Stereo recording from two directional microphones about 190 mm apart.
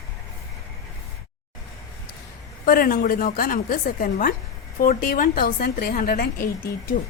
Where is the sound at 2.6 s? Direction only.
50° left (ahead or behind).